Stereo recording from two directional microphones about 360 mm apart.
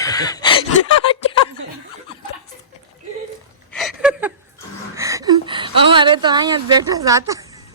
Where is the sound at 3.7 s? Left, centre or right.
Centre.